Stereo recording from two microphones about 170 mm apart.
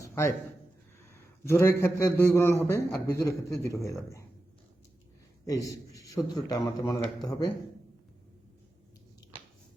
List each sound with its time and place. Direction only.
0.0 s a sound: 15° left (ahead or behind)
1.1 s a man's voice: 15° left (ahead or behind)
5.5 s a man's voice: 20° left (ahead or behind)